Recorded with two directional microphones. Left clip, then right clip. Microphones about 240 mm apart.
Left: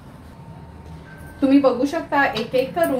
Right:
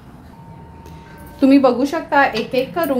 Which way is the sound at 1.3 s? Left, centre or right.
Right.